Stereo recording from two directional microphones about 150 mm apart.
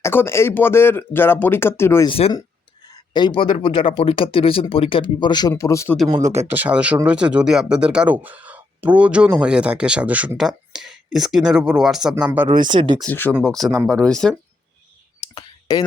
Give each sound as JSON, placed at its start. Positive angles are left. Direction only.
{"t": 0.0, "sound": "speech", "side_deg": 15}
{"t": 2.0, "sound": "speech", "side_deg": 40}
{"t": 2.8, "sound": "speech", "side_deg": 25}
{"t": 6.5, "sound": "speech", "side_deg": -10}
{"t": 12.6, "sound": "speech", "side_deg": -30}
{"t": 13.0, "sound": "speech", "side_deg": 10}
{"t": 15.4, "sound": "clicking", "side_deg": 25}